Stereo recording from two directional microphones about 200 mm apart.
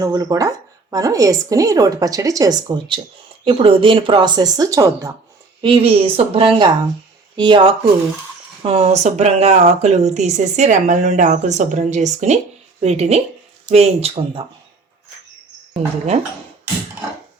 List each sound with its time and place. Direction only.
0.0 s speech: 20° right (ahead or behind)
5.6 s speech: 30° right (ahead or behind)